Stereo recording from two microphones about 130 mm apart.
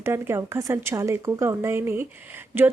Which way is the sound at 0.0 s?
20° right (ahead or behind).